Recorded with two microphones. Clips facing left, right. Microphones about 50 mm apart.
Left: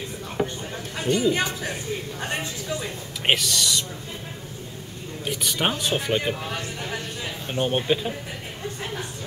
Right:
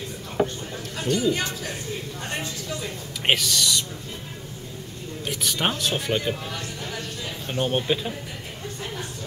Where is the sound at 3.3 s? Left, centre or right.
Centre.